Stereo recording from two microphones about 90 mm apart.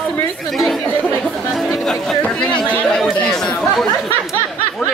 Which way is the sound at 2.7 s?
15° left (ahead or behind).